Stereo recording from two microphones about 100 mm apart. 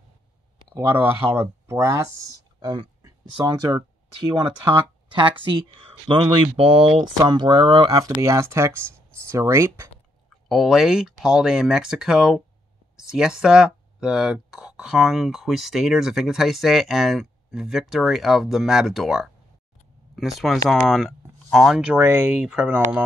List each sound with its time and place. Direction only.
0.7 s speech: 25° right (ahead or behind); by 2.9 s 45° right (ahead or behind)
3.4 s speech: 35° right (ahead or behind)
6.0 s speech: 55° right (ahead or behind)
7.2 s speech: 45° right (ahead or behind)
7.9 s speech: 35° right (ahead or behind)
10.5 s speech: 5° right (ahead or behind)
21.9 s speech: 25° right (ahead or behind)
22.3 s speech: 10° right (ahead or behind)